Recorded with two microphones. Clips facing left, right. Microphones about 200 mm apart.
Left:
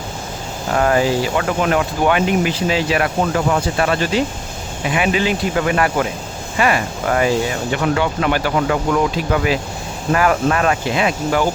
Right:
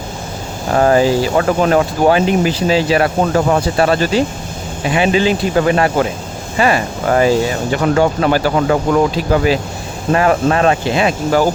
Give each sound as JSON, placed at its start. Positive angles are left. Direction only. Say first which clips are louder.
{"t": 0.7, "sound": "speech", "louder": "right 4 dB", "side_deg": -30}